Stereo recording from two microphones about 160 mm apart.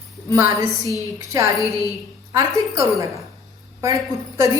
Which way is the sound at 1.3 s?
20° right (ahead or behind).